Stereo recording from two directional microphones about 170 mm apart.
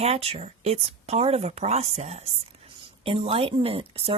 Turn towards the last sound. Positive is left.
turn(degrees=-35)  # may be behind; listen again after turning